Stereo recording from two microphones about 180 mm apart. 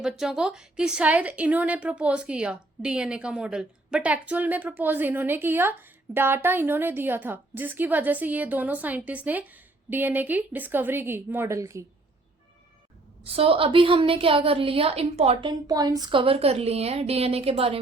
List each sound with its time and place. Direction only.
0.0 s a woman's voice: 5° right (ahead or behind)
13.2 s a woman's voice: 30° right (ahead or behind)